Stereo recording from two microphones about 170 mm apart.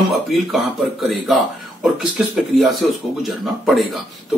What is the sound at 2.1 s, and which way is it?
Speech, centre (ahead or behind).